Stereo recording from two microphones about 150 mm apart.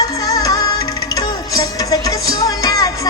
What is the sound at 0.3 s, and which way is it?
Music, 25° left (ahead or behind).